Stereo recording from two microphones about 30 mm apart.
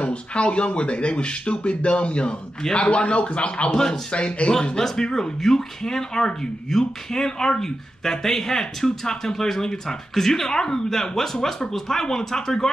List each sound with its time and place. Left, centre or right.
0.0 s a man's voice: left
3.7 s speech: left
4.1 s a man's voice: left
4.7 s speech: centre